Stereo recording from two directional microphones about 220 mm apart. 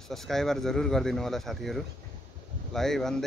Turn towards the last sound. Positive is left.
turn(degrees=0)  # may be behind; listen again after turning